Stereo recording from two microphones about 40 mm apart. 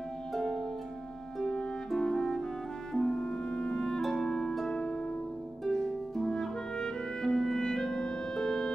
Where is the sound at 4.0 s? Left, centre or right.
Centre.